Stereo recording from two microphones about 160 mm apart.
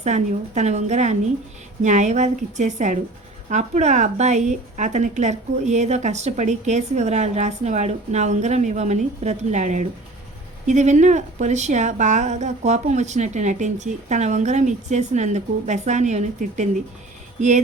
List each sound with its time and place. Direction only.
0.0 s a woman's voice: 45° right (ahead or behind)